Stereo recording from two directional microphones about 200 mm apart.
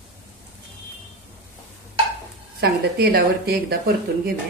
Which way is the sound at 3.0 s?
50° right (ahead or behind).